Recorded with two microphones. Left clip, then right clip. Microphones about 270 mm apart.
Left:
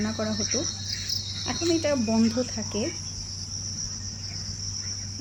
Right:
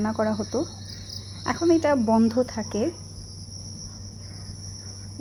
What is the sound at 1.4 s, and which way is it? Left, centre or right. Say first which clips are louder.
Speech: right 5 dB; centre.